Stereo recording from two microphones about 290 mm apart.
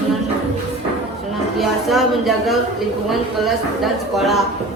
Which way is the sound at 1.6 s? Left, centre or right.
Centre.